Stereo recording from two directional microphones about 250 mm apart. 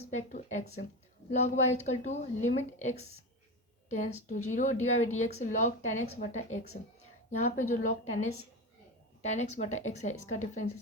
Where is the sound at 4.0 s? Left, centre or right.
Left.